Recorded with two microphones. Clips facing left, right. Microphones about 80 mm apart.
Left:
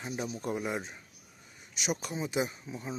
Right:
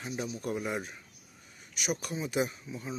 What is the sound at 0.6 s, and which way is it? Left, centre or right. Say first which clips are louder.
Speech: even; centre.